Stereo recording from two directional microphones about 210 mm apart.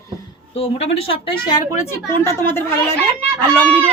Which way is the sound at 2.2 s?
10° left (ahead or behind).